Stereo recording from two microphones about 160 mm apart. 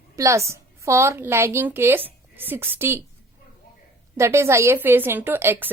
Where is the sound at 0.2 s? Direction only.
20° right (ahead or behind).